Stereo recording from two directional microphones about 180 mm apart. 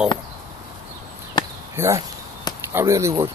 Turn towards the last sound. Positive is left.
turn(degrees=-15)  # may be behind; listen again after turning